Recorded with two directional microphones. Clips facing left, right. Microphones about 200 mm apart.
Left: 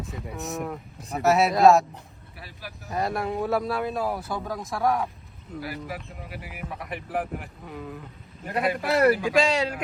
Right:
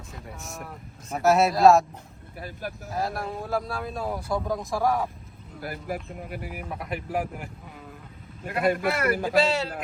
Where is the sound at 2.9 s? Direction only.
Centre (ahead or behind).